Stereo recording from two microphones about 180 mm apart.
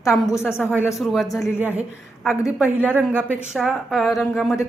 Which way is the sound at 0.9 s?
Centre (ahead or behind).